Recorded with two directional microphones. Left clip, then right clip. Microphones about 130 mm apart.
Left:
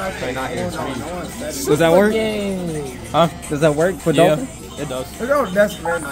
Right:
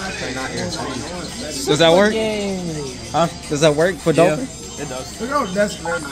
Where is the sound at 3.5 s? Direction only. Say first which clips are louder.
Right 1 dB; centre (ahead or behind).